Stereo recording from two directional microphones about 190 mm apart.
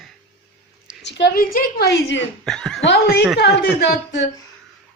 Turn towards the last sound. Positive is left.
turn(degrees=65)  # may be behind; listen again after turning